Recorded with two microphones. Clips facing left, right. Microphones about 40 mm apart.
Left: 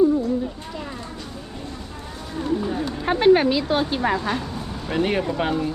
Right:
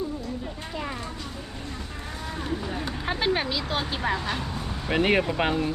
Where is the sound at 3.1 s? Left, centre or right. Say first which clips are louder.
Left 10 dB; left.